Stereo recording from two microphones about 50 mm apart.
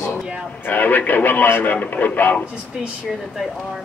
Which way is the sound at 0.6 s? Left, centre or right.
Left.